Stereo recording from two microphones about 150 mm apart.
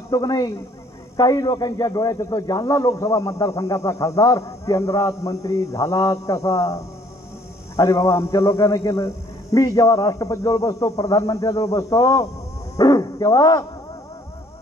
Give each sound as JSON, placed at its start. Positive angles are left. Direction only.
{"t": 0.1, "sound": "a man's voice", "side_deg": 25}